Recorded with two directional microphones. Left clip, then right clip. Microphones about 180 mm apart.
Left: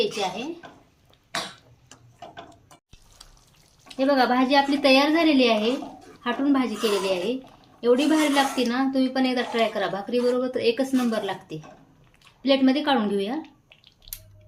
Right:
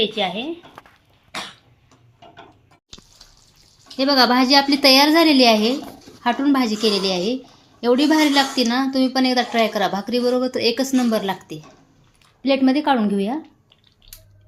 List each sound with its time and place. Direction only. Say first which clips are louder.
3.9 s a woman's voice: right 5 dB; 60° right (ahead or behind); by 13.3 s 40° right (ahead or behind)